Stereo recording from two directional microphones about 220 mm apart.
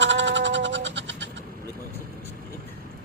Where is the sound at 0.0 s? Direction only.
55° right (ahead or behind).